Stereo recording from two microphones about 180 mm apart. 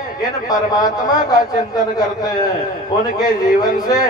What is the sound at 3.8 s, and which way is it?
Speech, 20° left (ahead or behind).